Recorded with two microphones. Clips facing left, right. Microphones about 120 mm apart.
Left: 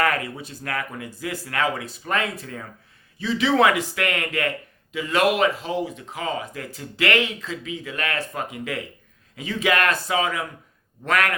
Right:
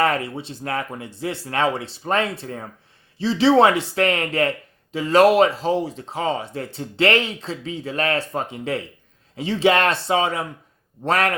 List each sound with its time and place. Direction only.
0.0 s a man's voice: 30° right (ahead or behind)